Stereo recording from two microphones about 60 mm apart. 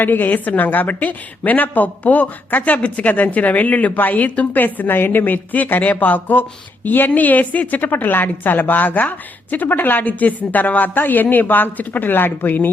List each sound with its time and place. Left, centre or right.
0.0 s a woman's voice: left